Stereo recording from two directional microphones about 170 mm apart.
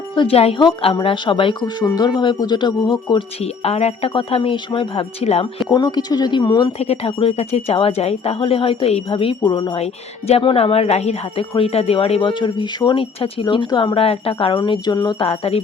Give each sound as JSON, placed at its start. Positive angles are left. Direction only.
{"t": 0.2, "sound": "speech", "side_deg": 35}
{"t": 5.6, "sound": "speech", "side_deg": 25}
{"t": 6.7, "sound": "speech", "side_deg": 35}